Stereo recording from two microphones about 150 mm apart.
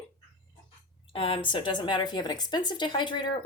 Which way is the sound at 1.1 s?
40° left (ahead or behind).